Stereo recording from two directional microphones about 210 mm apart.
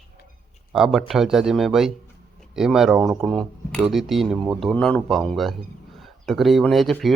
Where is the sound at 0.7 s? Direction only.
Centre (ahead or behind).